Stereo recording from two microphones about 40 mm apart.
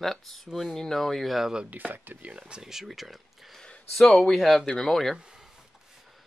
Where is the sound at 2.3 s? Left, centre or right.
Right.